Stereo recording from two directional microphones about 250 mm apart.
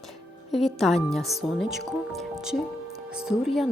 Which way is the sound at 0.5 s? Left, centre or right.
Centre.